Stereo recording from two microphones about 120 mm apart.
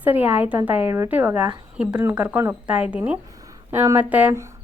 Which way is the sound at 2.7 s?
10° right (ahead or behind).